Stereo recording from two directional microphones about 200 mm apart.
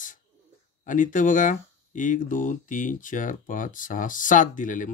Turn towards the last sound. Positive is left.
turn(degrees=40)  # may be behind; listen again after turning